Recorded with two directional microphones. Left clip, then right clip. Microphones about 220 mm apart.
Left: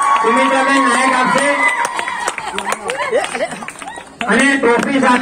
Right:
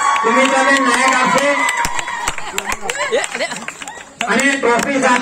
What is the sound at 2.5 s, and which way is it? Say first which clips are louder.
Speech: left 2 dB; 55° right (ahead or behind).